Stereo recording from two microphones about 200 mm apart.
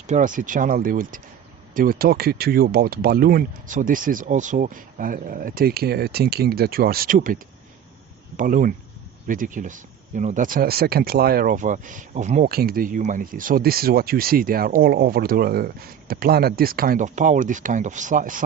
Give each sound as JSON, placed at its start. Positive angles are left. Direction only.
{"t": 0.1, "sound": "speech", "side_deg": -40}